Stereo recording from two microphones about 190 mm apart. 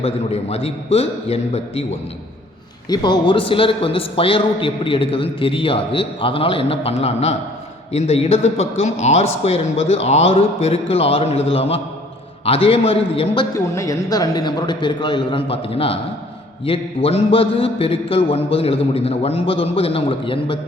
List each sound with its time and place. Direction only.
0.0 s a man's voice: 30° left (ahead or behind)
2.9 s a man's voice: 25° left (ahead or behind)